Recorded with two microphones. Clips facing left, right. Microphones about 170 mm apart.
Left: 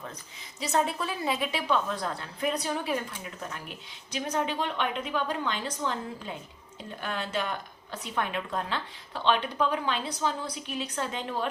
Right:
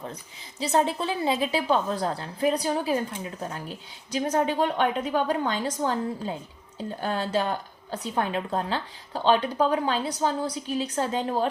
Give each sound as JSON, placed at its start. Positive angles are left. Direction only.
{"t": 0.6, "sound": "a woman's voice", "side_deg": -30}